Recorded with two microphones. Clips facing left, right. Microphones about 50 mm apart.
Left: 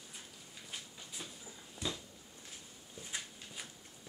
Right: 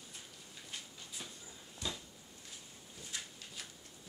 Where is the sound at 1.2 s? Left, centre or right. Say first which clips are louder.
Left 1 dB; centre.